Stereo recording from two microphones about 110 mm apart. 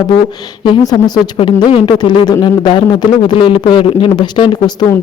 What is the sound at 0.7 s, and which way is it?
A man's voice, 35° left (ahead or behind).